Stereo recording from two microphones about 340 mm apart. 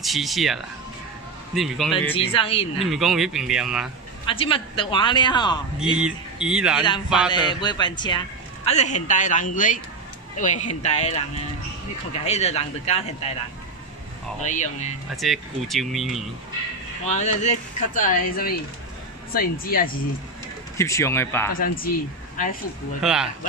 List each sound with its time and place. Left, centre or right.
0.0 s speech: centre
2.1 s speech: centre
2.8 s speech: centre
4.3 s speech: centre
5.9 s speech: centre
7.2 s speech: centre
12.3 s speech: centre
14.4 s speech: left
15.1 s speech: centre
17.0 s speech: centre
20.7 s speech: centre
21.5 s speech: left
23.0 s speech: centre